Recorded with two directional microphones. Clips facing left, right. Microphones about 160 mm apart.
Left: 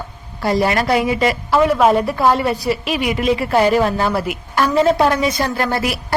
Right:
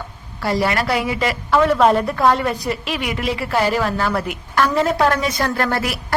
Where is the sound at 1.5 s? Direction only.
10° left (ahead or behind).